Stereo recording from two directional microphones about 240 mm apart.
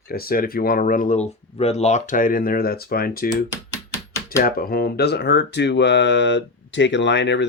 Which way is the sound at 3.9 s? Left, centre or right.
Centre.